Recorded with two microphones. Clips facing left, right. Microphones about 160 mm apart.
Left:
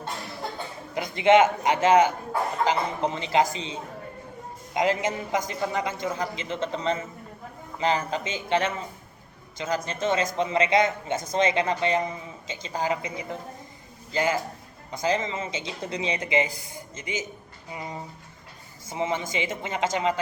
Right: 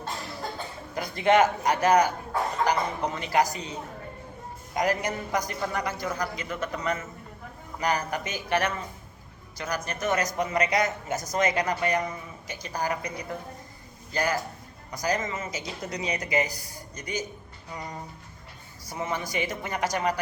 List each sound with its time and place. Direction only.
0.9 s a man's voice: 20° left (ahead or behind)
18.9 s speech: 20° left (ahead or behind)